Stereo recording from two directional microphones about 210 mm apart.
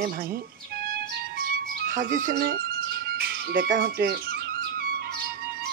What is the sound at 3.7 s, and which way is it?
Speech, 45° right (ahead or behind).